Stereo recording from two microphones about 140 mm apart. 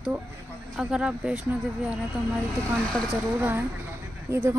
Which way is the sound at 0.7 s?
5° right (ahead or behind).